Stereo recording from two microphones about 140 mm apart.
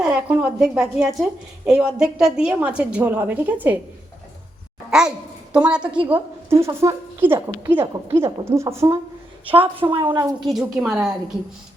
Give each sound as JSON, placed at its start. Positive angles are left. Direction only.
{"t": 0.0, "sound": "a woman's voice", "side_deg": -10}
{"t": 4.9, "sound": "a woman's voice", "side_deg": -5}
{"t": 7.3, "sound": "a woman's voice", "side_deg": -25}
{"t": 7.7, "sound": "a woman's voice", "side_deg": -15}
{"t": 9.8, "sound": "a woman's voice", "side_deg": -35}
{"t": 10.4, "sound": "a woman's voice", "side_deg": -5}